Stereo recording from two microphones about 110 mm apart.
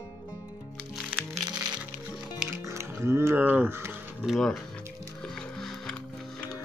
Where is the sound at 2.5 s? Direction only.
25° right (ahead or behind).